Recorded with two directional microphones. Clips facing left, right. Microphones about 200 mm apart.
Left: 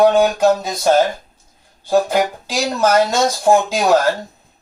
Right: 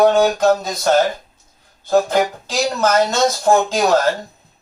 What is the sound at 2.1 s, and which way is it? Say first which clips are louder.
Speech: even; 10° left (ahead or behind).